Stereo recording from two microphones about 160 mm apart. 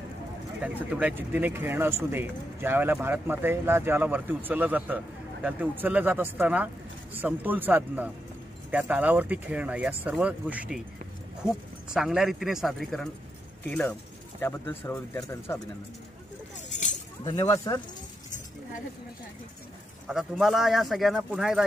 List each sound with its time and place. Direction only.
0.6 s a man's voice: 10° right (ahead or behind); by 15.6 s 15° left (ahead or behind)
17.7 s speech: 25° left (ahead or behind)
20.1 s a man's voice: centre (ahead or behind)